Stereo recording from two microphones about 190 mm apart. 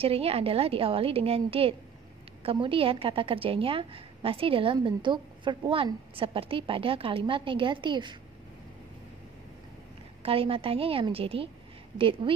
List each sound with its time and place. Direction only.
0.0 s a woman's voice: 30° right (ahead or behind)
10.2 s a woman's voice: 30° right (ahead or behind)